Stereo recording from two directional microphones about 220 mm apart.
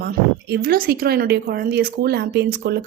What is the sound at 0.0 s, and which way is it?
Speech, 45° right (ahead or behind).